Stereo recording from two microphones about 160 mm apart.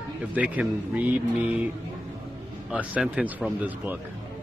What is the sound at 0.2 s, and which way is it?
Speech, 10° right (ahead or behind).